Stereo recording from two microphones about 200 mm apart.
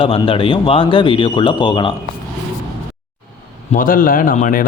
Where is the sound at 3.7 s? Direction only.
45° left (ahead or behind).